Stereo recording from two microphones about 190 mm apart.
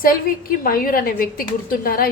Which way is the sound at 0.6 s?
50° left (ahead or behind).